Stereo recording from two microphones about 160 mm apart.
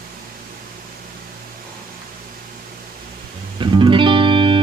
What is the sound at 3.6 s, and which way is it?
Music, 30° right (ahead or behind).